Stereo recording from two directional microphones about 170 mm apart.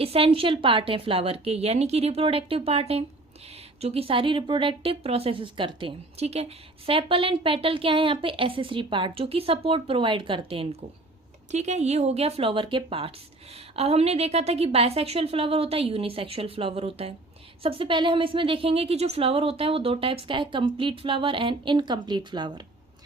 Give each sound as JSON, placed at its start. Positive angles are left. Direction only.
{"t": 0.0, "sound": "a woman's voice", "side_deg": -35}